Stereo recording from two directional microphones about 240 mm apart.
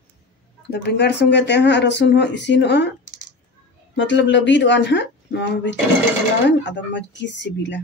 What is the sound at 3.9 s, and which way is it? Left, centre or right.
Speech, left.